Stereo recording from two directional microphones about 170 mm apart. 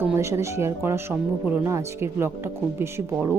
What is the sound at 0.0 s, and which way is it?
Speech, 15° right (ahead or behind).